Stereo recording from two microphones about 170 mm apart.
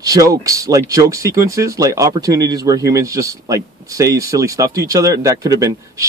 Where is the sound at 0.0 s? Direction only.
20° right (ahead or behind).